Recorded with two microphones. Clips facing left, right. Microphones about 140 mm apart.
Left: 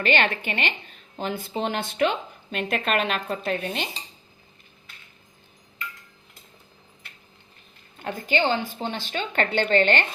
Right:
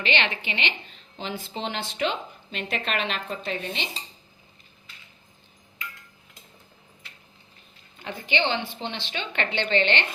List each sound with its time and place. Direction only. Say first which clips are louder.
0.0 s a woman's voice: left 4 dB; 45° left (ahead or behind)
7.9 s a woman's voice: left 3 dB; 45° left (ahead or behind)